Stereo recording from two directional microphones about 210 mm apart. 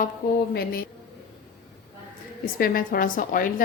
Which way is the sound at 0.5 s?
45° left (ahead or behind).